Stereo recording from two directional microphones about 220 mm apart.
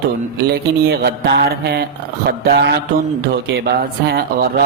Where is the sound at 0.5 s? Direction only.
45° right (ahead or behind).